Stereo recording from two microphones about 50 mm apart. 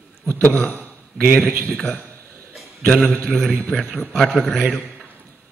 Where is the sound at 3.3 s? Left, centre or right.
Centre.